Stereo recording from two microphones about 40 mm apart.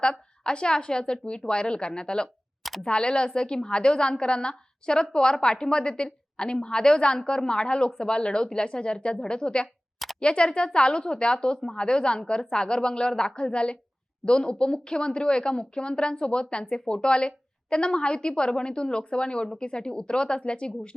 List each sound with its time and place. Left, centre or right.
0.0 s a woman's voice: left